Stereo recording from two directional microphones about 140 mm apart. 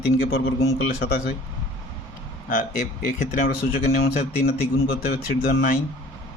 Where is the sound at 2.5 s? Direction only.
75° left (ahead or behind).